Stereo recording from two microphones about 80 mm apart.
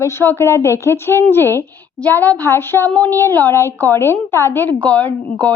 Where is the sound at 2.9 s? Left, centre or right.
Centre.